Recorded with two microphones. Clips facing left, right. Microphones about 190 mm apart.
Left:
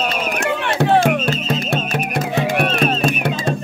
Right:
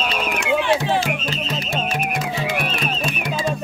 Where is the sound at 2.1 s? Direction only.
60° left (ahead or behind).